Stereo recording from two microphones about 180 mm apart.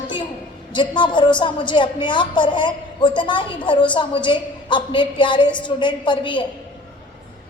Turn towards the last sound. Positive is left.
turn(degrees=25)  # may be behind; listen again after turning